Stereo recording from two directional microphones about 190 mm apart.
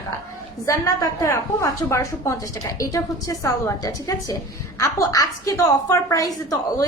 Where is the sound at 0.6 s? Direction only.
15° left (ahead or behind).